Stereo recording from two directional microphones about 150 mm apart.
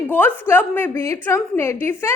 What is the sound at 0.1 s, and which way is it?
A woman's voice, 10° left (ahead or behind).